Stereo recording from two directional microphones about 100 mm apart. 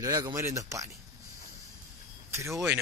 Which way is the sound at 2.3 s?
30° right (ahead or behind).